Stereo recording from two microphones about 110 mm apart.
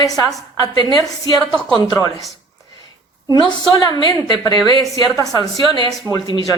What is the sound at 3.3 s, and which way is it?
Speech, 40° left (ahead or behind).